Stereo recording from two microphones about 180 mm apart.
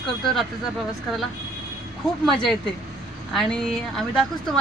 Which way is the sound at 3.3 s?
Centre (ahead or behind).